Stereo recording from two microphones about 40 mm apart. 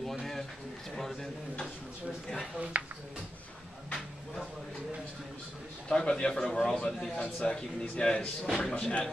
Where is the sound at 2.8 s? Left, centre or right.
Right.